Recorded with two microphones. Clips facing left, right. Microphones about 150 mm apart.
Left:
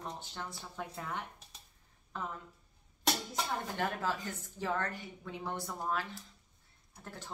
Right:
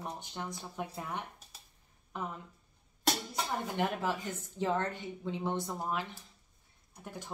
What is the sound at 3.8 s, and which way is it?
A woman's voice, 20° right (ahead or behind).